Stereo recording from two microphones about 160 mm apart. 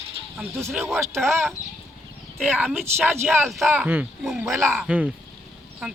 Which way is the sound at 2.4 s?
10° right (ahead or behind).